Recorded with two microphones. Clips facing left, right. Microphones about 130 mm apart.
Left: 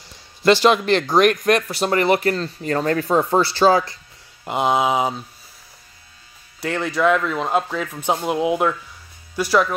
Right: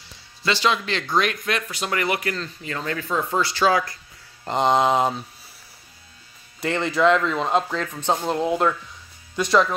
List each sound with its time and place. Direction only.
0.4 s speech: 50° left (ahead or behind)
1.7 s speech: 35° left (ahead or behind)
4.5 s speech: 5° left (ahead or behind)
6.6 s speech: centre (ahead or behind)